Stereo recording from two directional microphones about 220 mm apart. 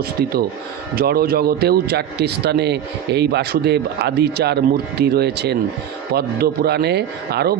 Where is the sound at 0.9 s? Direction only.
45° right (ahead or behind).